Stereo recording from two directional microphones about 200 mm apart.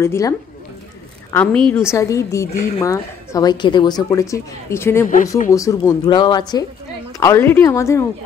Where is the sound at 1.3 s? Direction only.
5° left (ahead or behind).